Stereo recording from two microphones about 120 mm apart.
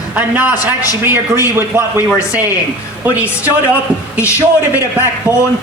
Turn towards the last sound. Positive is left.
turn(degrees=25)  # may be behind; listen again after turning